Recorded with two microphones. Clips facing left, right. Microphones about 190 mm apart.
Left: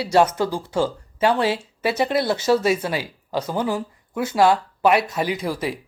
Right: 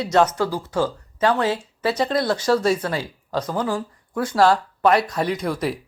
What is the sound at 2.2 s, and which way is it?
Music, 25° left (ahead or behind).